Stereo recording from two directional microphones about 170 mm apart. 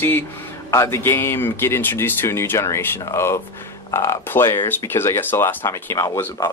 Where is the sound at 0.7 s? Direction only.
15° left (ahead or behind).